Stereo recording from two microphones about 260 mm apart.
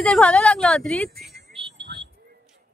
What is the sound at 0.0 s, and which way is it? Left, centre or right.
Speech, centre.